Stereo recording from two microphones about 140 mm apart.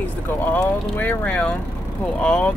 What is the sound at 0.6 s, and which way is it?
Speech, 10° left (ahead or behind).